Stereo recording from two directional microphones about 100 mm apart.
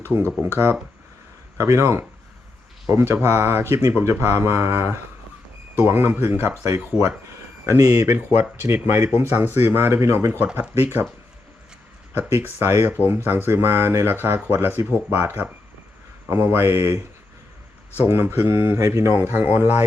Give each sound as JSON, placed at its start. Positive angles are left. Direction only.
{"t": 0.0, "sound": "speech", "side_deg": -20}
{"t": 12.1, "sound": "speech", "side_deg": -15}
{"t": 18.0, "sound": "speech", "side_deg": -20}